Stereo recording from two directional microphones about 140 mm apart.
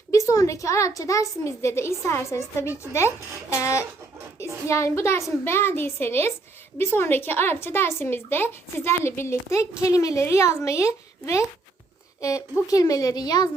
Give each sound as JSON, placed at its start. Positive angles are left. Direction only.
{"t": 0.1, "sound": "a woman's voice", "side_deg": 20}